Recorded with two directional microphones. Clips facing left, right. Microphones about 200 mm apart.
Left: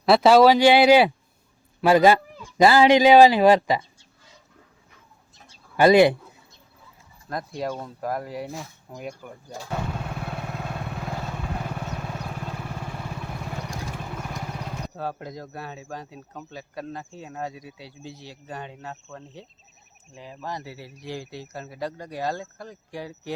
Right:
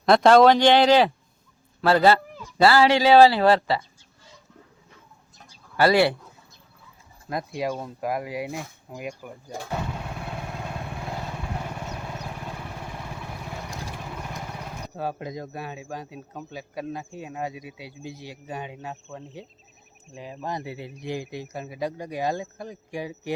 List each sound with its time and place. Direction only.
0.0 s speech: 5° left (ahead or behind)
5.5 s bird: 20° left (ahead or behind)
7.3 s speech: 5° right (ahead or behind)
14.9 s speech: 15° right (ahead or behind)